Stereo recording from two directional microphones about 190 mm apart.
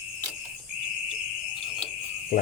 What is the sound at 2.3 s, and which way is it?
Cricket, 40° left (ahead or behind).